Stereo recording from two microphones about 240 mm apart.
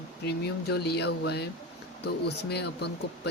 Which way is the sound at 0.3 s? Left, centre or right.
Left.